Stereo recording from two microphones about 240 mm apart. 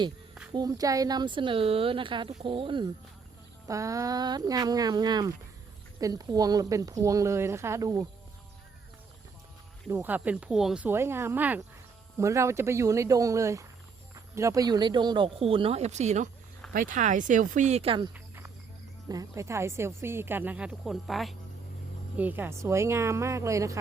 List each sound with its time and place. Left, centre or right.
0.5 s a woman's voice: centre
9.9 s a woman's voice: centre
18.1 s cricket: centre
19.0 s a woman's voice: centre